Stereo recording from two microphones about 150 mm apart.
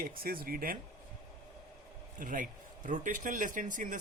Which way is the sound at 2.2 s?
65° right (ahead or behind).